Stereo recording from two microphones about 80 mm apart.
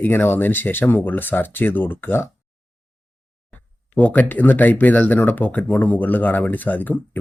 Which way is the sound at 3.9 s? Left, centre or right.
Centre.